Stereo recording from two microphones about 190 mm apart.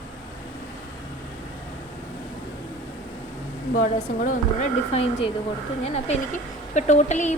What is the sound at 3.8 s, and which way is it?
Speech, 45° left (ahead or behind).